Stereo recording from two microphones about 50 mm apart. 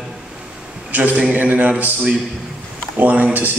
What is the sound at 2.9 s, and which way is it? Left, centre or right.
Speech, right.